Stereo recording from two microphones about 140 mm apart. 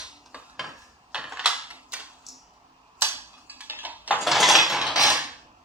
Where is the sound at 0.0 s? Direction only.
5° right (ahead or behind).